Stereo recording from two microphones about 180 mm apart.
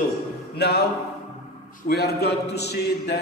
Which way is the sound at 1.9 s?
65° left (ahead or behind).